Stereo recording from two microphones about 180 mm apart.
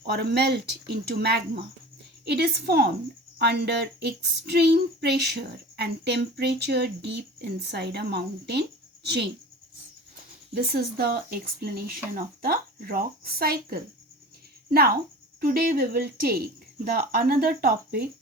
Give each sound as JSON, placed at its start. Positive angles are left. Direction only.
{"t": 0.1, "sound": "speech", "side_deg": -65}
{"t": 10.5, "sound": "speech", "side_deg": -60}